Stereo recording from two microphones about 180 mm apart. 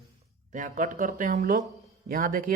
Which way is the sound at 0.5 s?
45° right (ahead or behind).